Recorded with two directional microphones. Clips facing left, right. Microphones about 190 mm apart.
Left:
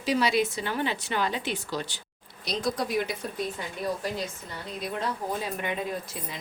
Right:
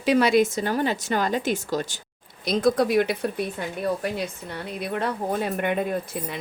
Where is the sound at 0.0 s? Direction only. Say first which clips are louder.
Right 6 dB; 55° right (ahead or behind).